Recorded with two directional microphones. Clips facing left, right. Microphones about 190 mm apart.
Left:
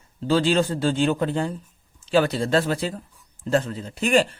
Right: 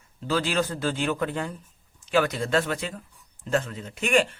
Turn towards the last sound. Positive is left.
turn(degrees=35)  # may be behind; listen again after turning